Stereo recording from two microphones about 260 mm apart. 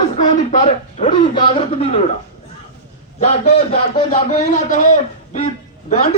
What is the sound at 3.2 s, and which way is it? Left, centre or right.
A man's voice, left.